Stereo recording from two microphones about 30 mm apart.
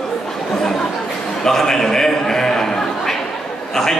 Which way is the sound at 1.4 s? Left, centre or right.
Centre.